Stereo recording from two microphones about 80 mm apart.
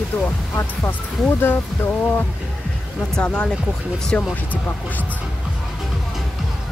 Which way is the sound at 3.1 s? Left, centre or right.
Centre.